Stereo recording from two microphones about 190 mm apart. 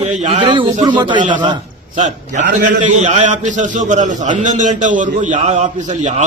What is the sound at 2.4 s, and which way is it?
A man's voice, 40° right (ahead or behind).